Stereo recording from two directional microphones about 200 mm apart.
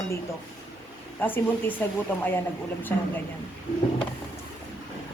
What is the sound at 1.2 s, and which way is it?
Speech, 10° left (ahead or behind).